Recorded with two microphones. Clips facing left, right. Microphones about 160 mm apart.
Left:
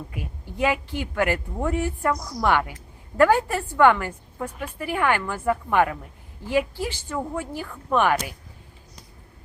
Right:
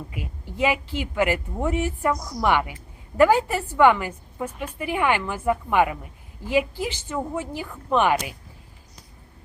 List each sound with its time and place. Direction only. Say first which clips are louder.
0.9 s a woman's voice: right 1 dB; 10° right (ahead or behind)